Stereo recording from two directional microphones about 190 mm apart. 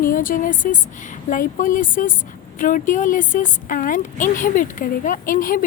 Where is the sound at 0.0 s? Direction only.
45° left (ahead or behind).